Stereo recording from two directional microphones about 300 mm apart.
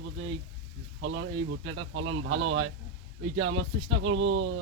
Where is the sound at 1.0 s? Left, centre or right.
Right.